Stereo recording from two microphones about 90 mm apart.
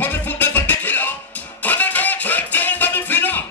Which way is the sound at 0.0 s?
20° left (ahead or behind).